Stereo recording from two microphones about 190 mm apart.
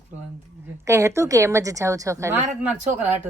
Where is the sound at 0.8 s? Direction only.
15° right (ahead or behind).